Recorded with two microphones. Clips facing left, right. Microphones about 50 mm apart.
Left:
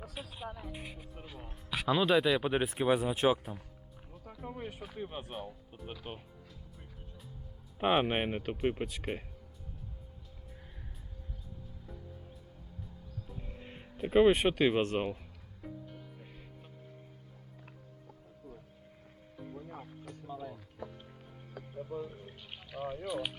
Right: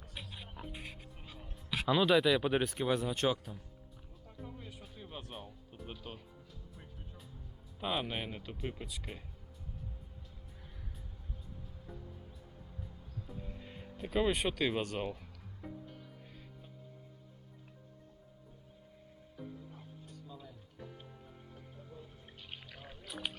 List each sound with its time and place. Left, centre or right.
0.1 s music: centre
0.7 s speech: centre
4.1 s music: left
4.5 s music: left
4.9 s speech: left
5.7 s speech: centre
7.8 s speech: left
13.6 s music: left
14.1 s speech: left
19.5 s music: left
20.2 s music: left
21.5 s music: left
22.5 s pour: centre
23.0 s speech: centre